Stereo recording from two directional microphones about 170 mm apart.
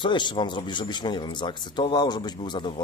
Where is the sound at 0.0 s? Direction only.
25° left (ahead or behind).